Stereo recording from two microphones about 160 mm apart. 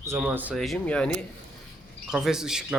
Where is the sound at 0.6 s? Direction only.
5° left (ahead or behind).